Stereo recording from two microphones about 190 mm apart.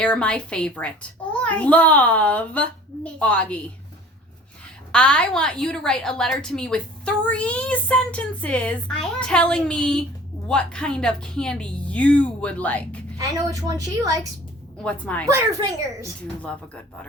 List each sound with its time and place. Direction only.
0.0 s a child's voice: 5° left (ahead or behind)
4.9 s a woman's voice: 5° left (ahead or behind)
13.1 s a woman's voice: 20° right (ahead or behind)
14.8 s a child's voice: 5° left (ahead or behind)
15.3 s a woman's voice: 15° right (ahead or behind)
16.2 s a child's voice: 5° left (ahead or behind)